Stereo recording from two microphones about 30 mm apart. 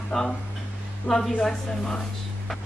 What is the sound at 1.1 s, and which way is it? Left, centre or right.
Speech, left.